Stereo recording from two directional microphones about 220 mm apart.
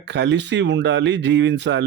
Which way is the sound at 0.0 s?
55° right (ahead or behind).